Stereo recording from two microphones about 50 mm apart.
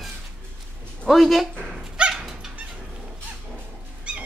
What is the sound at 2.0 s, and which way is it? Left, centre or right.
Dog, centre.